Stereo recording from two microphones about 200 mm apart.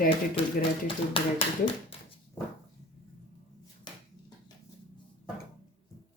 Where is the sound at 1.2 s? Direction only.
25° left (ahead or behind).